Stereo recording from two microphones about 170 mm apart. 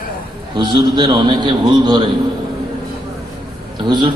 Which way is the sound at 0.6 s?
25° right (ahead or behind).